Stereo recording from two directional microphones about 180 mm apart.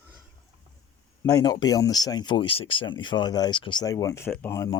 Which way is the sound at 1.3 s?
20° left (ahead or behind).